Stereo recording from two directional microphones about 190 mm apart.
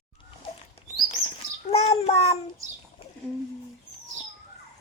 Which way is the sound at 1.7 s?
30° left (ahead or behind).